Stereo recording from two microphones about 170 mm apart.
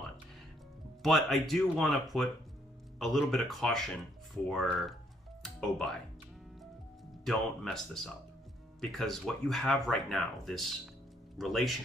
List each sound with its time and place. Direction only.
1.0 s speech: centre (ahead or behind)
5.4 s music: centre (ahead or behind)
7.2 s speech: centre (ahead or behind)